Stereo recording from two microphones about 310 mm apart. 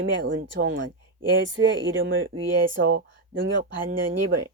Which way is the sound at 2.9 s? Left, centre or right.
Right.